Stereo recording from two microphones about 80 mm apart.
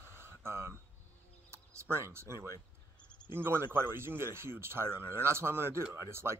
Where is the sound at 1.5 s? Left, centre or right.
Right.